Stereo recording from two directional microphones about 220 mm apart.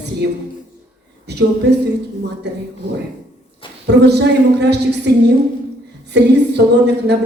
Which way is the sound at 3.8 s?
50° right (ahead or behind).